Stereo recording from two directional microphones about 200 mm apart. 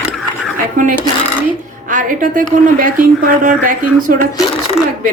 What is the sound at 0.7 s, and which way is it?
A woman's voice, 40° right (ahead or behind).